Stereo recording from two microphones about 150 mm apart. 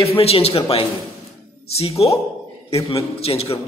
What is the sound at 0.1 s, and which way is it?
A man's voice, 40° left (ahead or behind).